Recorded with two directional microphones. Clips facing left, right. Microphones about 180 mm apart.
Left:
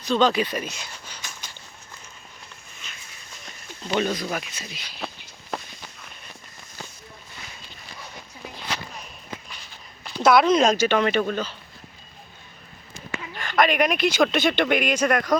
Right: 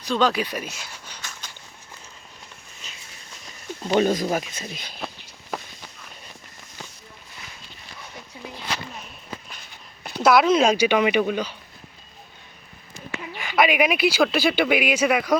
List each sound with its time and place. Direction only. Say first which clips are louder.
0.1 s speech: left 1 dB; 10° right (ahead or behind)
1.0 s a sound: even; 10° left (ahead or behind)
3.8 s speech: right 5 dB; 40° right (ahead or behind)
4.9 s walk: even; centre (ahead or behind)
10.2 s speech: even; 5° right (ahead or behind)
13.3 s speech: right 1 dB; 10° right (ahead or behind)